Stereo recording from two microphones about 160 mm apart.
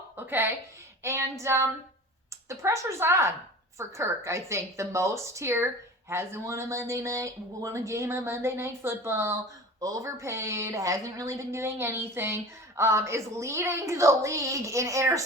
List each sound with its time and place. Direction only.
0.2 s a woman's voice: 15° right (ahead or behind)